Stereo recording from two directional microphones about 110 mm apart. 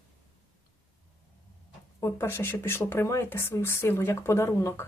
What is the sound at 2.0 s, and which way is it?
Speech, 25° left (ahead or behind).